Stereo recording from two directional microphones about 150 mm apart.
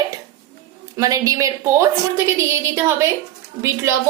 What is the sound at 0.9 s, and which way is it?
A woman's voice, 25° right (ahead or behind).